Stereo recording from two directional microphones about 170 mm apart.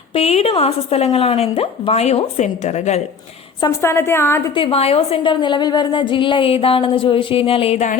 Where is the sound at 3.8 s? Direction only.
15° left (ahead or behind).